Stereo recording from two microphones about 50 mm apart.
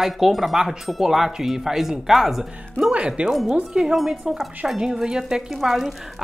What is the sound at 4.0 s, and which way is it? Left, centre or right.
Speech, centre.